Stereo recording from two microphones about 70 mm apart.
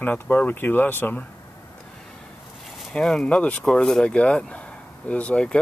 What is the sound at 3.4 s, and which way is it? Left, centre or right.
Speech, centre.